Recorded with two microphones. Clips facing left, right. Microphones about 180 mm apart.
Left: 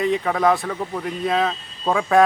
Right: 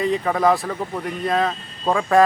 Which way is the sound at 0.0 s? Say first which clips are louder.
Even; centre (ahead or behind).